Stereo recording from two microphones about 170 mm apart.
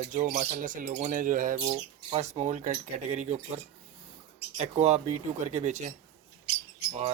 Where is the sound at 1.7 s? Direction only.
40° right (ahead or behind).